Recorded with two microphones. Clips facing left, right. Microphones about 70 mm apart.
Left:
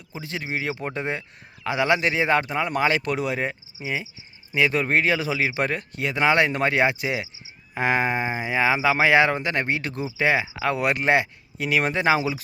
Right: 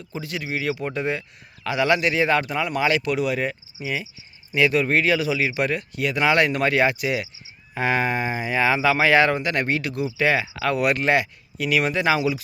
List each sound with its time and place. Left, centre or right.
0.2 s speech: left
10.2 s speech: left